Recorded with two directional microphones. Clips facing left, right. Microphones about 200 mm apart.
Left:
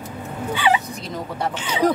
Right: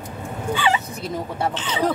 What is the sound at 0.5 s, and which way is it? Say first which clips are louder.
Speech: left 2 dB; 15° left (ahead or behind).